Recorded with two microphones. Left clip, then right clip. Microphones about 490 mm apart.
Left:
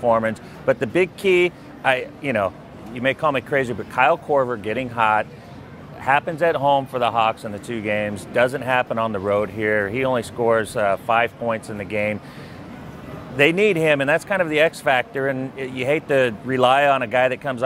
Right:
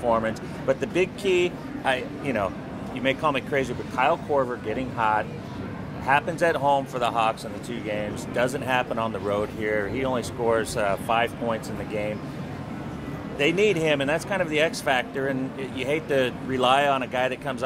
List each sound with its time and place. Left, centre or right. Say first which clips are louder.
0.1 s speech: left 5 dB; left
13.4 s speech: left 5 dB; left